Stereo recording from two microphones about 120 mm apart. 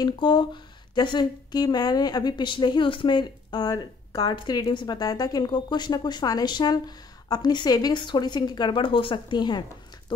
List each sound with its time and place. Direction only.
0.0 s speech: 40° left (ahead or behind)